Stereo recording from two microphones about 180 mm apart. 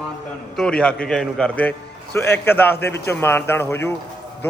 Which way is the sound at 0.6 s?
5° left (ahead or behind).